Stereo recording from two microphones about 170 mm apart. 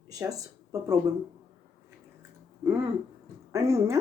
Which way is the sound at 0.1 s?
20° right (ahead or behind).